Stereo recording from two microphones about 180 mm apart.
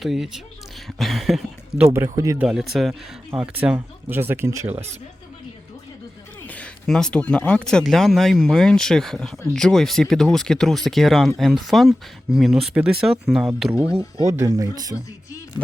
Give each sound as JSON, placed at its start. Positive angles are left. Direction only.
{"t": 0.0, "sound": "speech", "side_deg": 0}
{"t": 2.1, "sound": "speech", "side_deg": -20}
{"t": 2.4, "sound": "speech", "side_deg": 0}
{"t": 3.8, "sound": "speech", "side_deg": -10}
{"t": 6.5, "sound": "speech", "side_deg": 5}
{"t": 14.3, "sound": "speech", "side_deg": -15}